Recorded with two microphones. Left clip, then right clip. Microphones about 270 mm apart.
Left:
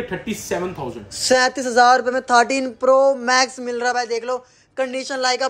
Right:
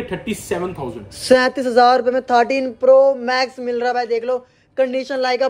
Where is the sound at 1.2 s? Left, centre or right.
Centre.